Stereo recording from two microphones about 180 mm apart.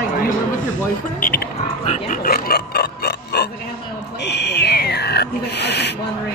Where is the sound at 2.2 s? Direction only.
60° left (ahead or behind).